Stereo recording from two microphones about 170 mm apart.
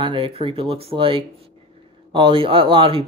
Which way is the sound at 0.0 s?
30° right (ahead or behind).